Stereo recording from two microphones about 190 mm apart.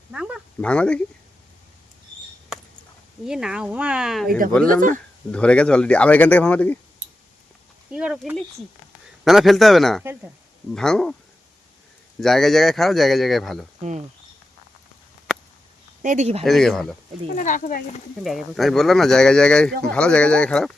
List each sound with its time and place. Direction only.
0.1 s speech: 5° right (ahead or behind)
3.2 s speech: 5° right (ahead or behind)
4.6 s speech: 45° right (ahead or behind)
5.3 s speech: 5° left (ahead or behind)
7.9 s speech: 5° right (ahead or behind)
12.2 s speech: centre (ahead or behind)
16.0 s speech: 35° right (ahead or behind)
16.4 s speech: centre (ahead or behind)
17.3 s speech: 40° left (ahead or behind)
18.2 s speech: centre (ahead or behind)